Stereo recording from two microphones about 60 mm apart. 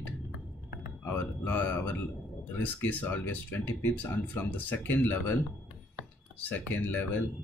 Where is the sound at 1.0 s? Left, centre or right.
Left.